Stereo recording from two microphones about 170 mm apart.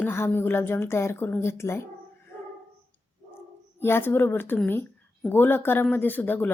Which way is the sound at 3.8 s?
15° left (ahead or behind).